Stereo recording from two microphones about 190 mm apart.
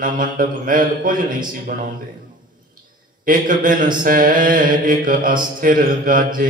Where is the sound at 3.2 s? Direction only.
45° right (ahead or behind).